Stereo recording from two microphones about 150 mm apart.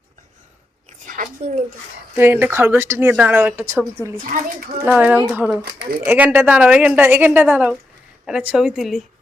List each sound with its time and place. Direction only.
1.0 s a woman's voice: 60° right (ahead or behind)
2.1 s speech: 15° right (ahead or behind)
4.2 s a child's voice: 65° right (ahead or behind)
4.9 s speech: 10° right (ahead or behind)
5.6 s speech: 90° right
6.1 s a woman's voice: 10° right (ahead or behind)